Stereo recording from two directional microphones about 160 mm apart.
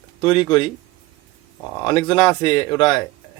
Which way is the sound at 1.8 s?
30° left (ahead or behind).